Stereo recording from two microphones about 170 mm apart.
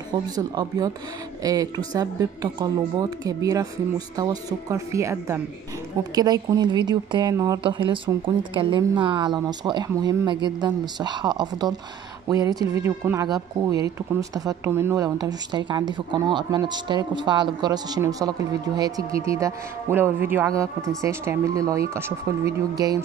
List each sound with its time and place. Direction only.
0.4 s speech: 20° right (ahead or behind)